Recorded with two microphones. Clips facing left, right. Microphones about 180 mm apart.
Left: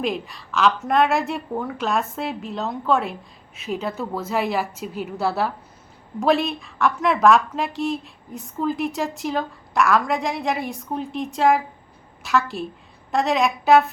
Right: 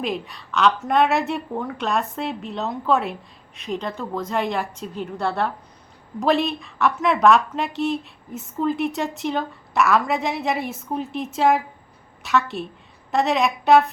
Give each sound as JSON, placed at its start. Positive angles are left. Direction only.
{"t": 0.0, "sound": "a woman's voice", "side_deg": 0}